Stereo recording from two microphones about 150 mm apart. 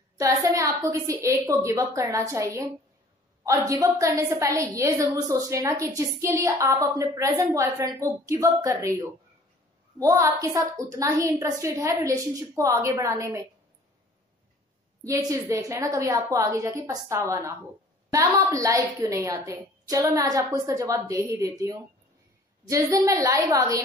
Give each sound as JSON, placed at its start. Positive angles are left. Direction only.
{"t": 0.2, "sound": "a woman's voice", "side_deg": -20}
{"t": 15.0, "sound": "a woman's voice", "side_deg": -20}